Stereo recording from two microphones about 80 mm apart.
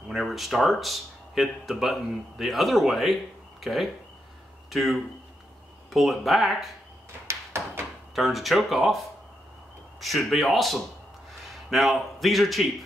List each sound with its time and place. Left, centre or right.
0.1 s speech: centre
7.2 s a sound: right
8.1 s a man's voice: centre